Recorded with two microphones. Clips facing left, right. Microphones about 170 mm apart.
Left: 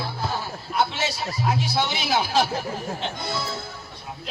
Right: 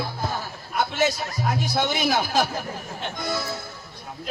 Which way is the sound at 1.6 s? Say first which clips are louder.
Right 1 dB; 50° right (ahead or behind).